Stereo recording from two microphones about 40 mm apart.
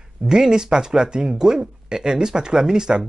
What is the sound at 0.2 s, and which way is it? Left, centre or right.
Speech, centre.